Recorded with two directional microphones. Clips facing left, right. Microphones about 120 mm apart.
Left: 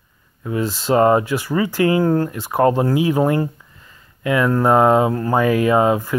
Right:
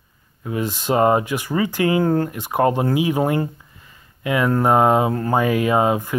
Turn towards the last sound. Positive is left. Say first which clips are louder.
# left 2 dB
turn(degrees=-20)  # may be behind; listen again after turning